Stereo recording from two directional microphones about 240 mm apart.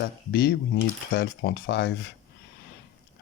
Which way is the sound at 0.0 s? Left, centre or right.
Left.